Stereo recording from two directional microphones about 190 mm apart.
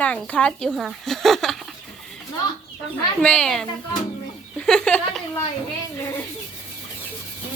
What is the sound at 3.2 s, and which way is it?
Speech, 5° left (ahead or behind).